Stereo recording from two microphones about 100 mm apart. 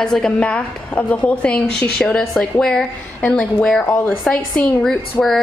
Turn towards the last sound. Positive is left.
turn(degrees=15)  # may be behind; listen again after turning